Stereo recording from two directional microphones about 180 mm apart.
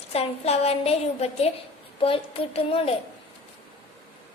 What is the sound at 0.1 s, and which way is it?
A woman's voice, 35° left (ahead or behind).